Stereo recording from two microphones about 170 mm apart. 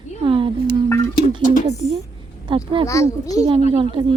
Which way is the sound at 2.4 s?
30° right (ahead or behind).